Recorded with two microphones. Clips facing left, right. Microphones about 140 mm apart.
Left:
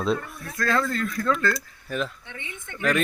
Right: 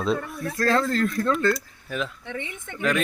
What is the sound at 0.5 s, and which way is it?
Speech, 30° right (ahead or behind).